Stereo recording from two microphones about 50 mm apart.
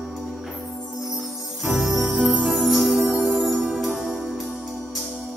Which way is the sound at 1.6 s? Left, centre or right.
Centre.